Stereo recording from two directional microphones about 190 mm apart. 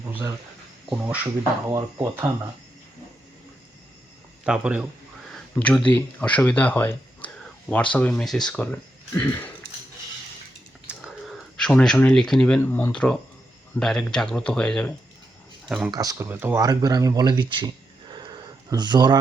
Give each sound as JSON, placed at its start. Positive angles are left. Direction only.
{"t": 0.1, "sound": "speech", "side_deg": -10}
{"t": 4.4, "sound": "speech", "side_deg": -5}
{"t": 5.3, "sound": "speech", "side_deg": 5}
{"t": 10.8, "sound": "speech", "side_deg": -5}
{"t": 15.9, "sound": "speech", "side_deg": -20}
{"t": 18.1, "sound": "a sound", "side_deg": -25}